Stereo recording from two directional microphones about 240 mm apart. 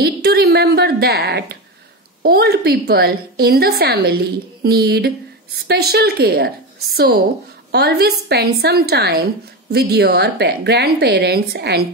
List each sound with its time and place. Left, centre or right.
0.0 s a woman's voice: right